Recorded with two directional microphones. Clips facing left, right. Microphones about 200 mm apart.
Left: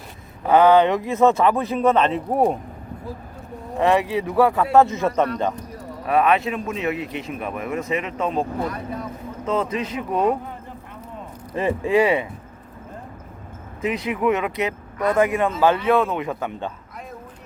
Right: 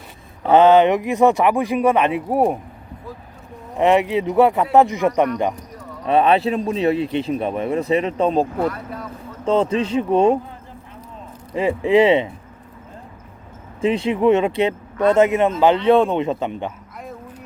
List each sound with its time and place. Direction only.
0.4 s speech: 25° right (ahead or behind); by 2.6 s 10° right (ahead or behind)
3.8 s speech: 20° right (ahead or behind)
6.1 s speech: 30° right (ahead or behind)
8.7 s speech: 15° left (ahead or behind)
9.5 s speech: 30° right (ahead or behind)
11.5 s speech: 15° right (ahead or behind)
13.8 s speech: 30° right (ahead or behind)